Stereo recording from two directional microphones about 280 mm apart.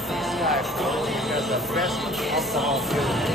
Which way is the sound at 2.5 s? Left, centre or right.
Centre.